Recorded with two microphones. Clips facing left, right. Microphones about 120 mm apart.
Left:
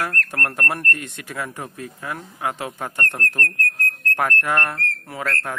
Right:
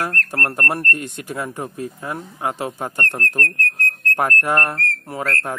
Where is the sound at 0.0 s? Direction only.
35° right (ahead or behind).